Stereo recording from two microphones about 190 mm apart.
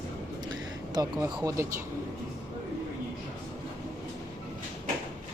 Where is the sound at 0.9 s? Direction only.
20° right (ahead or behind).